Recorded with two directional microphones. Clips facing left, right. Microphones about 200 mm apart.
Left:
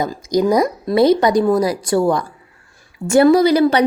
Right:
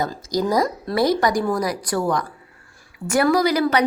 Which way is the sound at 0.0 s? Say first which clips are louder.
Left 6 dB; 15° left (ahead or behind).